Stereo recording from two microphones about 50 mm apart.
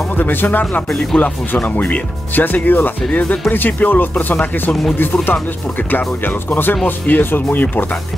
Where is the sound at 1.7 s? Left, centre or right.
Left.